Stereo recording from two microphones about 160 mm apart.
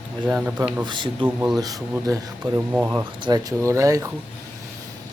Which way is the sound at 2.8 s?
25° right (ahead or behind).